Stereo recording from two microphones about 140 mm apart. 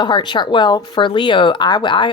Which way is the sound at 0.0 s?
30° left (ahead or behind).